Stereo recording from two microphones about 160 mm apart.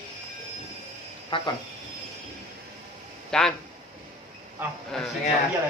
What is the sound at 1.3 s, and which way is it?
Speech, 35° left (ahead or behind).